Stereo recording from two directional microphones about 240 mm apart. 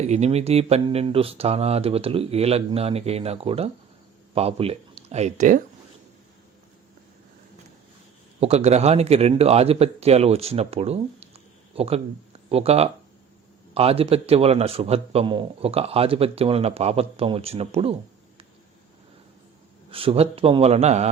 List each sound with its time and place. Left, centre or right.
0.0 s a man's voice: right
8.4 s a man's voice: right
19.9 s a man's voice: right